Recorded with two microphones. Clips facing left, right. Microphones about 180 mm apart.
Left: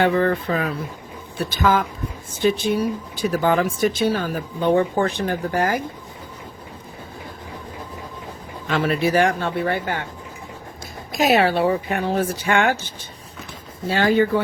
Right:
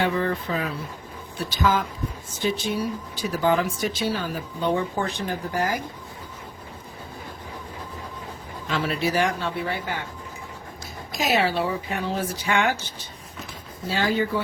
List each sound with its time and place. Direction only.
0.0 s speech: 60° left (ahead or behind)
8.7 s speech: 55° left (ahead or behind)
11.1 s speech: 60° left (ahead or behind)
13.8 s speech: 60° left (ahead or behind)